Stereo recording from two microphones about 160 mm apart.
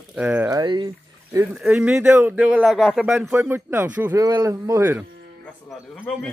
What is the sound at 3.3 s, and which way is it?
Speech, 15° right (ahead or behind).